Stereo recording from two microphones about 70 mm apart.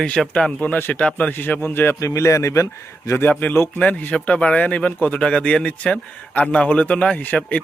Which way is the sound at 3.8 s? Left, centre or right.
Centre.